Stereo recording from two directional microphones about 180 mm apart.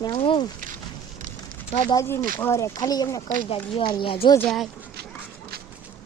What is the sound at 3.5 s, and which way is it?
Speech, 30° left (ahead or behind).